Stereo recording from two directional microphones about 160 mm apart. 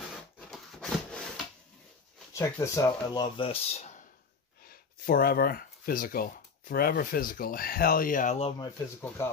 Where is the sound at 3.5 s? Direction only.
40° left (ahead or behind).